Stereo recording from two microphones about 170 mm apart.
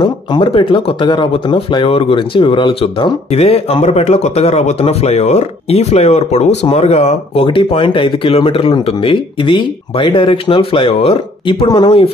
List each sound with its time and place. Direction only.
0.0 s speech: 30° left (ahead or behind)